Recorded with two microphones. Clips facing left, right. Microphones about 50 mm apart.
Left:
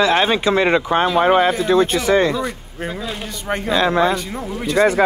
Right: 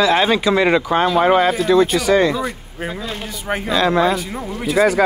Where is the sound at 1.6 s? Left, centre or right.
Left.